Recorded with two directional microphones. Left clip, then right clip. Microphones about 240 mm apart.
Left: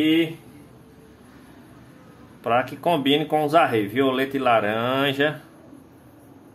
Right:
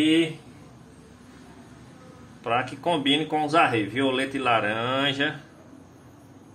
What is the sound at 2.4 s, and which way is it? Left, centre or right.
Speech, left.